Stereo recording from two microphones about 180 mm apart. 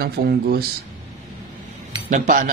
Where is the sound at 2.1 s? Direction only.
45° right (ahead or behind).